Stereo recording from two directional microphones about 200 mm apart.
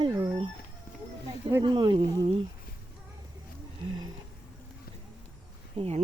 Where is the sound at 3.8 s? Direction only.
20° right (ahead or behind).